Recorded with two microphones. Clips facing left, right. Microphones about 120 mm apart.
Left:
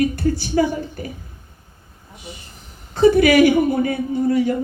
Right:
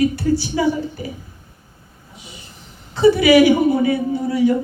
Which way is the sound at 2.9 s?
50° left (ahead or behind).